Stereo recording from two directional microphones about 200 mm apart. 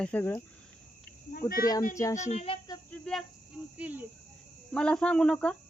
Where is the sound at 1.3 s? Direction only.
50° left (ahead or behind).